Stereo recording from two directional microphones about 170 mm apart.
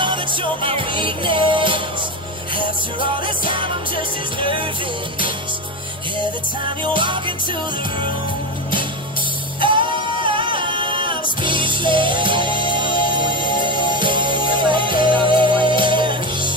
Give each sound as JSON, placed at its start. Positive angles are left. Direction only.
{"t": 0.0, "sound": "music", "side_deg": -30}
{"t": 3.4, "sound": "music", "side_deg": -30}
{"t": 6.8, "sound": "music", "side_deg": -30}
{"t": 9.6, "sound": "music", "side_deg": -30}